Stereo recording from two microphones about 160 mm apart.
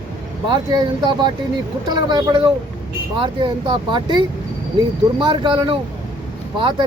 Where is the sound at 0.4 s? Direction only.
25° right (ahead or behind).